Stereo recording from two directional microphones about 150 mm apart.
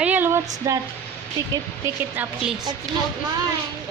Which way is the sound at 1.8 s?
10° right (ahead or behind).